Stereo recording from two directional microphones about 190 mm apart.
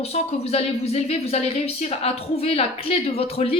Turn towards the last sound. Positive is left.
turn(degrees=30)  # may be behind; listen again after turning